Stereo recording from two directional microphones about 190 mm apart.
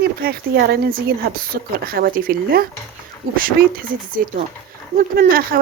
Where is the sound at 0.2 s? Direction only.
55° right (ahead or behind).